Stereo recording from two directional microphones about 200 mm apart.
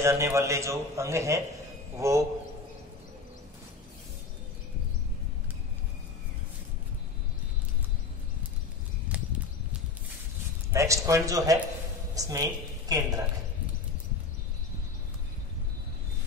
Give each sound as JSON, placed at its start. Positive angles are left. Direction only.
{"t": 0.0, "sound": "a man's voice", "side_deg": -15}
{"t": 10.7, "sound": "a man's voice", "side_deg": -15}